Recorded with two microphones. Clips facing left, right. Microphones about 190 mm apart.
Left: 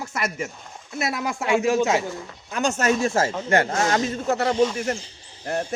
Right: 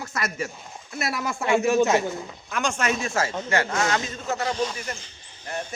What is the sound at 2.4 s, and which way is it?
A man's voice, 35° left (ahead or behind).